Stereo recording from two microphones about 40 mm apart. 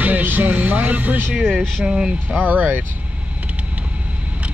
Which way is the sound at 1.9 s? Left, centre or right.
Centre.